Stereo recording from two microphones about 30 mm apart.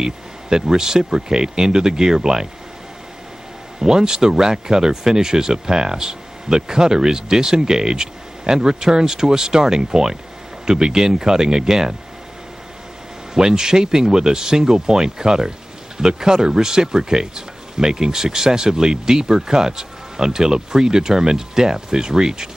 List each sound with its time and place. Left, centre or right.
0.0 s speech: right
3.8 s speech: right
13.3 s speech: right